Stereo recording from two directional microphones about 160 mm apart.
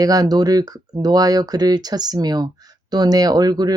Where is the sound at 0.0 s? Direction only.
25° right (ahead or behind).